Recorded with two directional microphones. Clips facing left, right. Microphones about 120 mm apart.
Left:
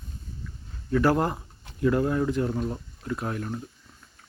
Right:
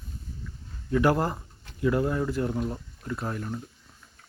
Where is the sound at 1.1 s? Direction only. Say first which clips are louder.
Left 2 dB; centre (ahead or behind).